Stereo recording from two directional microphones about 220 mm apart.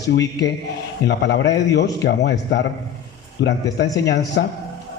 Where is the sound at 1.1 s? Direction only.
50° left (ahead or behind).